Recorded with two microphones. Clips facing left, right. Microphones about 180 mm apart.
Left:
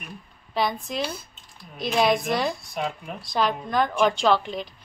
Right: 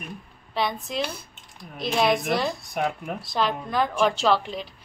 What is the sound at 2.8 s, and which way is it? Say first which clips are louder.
Speech: right 4 dB; 55° right (ahead or behind).